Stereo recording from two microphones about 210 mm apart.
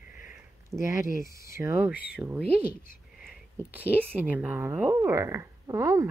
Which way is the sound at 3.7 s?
10° right (ahead or behind).